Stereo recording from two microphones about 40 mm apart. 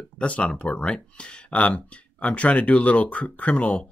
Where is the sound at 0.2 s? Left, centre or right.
Left.